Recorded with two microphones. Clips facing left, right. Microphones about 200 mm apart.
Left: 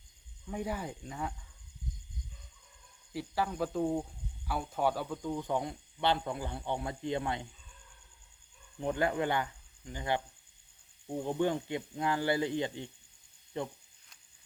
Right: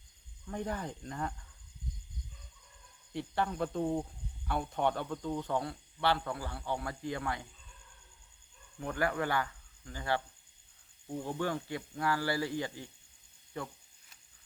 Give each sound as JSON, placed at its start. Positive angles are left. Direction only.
{"t": 0.4, "sound": "speech", "side_deg": 10}
{"t": 3.1, "sound": "speech", "side_deg": 5}
{"t": 8.8, "sound": "speech", "side_deg": 20}
{"t": 11.2, "sound": "speech", "side_deg": 20}